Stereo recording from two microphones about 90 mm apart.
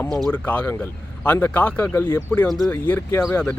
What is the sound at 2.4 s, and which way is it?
Speech, centre (ahead or behind).